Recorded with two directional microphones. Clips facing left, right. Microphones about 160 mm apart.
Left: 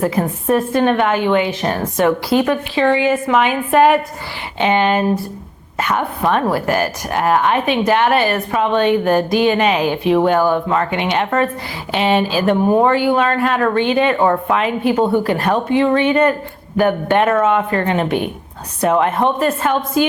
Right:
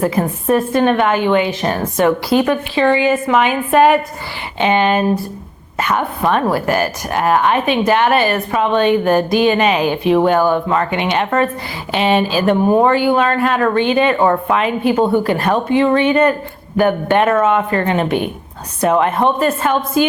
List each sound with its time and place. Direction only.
0.0 s a woman's voice: 15° right (ahead or behind)
12.5 s speech: 25° right (ahead or behind)
12.8 s a woman's voice: 10° right (ahead or behind)